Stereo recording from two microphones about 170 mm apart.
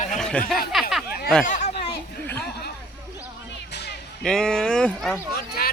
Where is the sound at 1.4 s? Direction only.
45° left (ahead or behind).